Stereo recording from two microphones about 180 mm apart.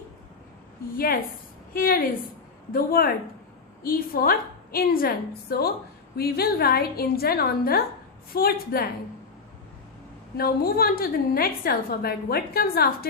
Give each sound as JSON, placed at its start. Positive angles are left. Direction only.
{"t": 0.9, "sound": "a woman's voice", "side_deg": 55}
{"t": 10.3, "sound": "a woman's voice", "side_deg": 55}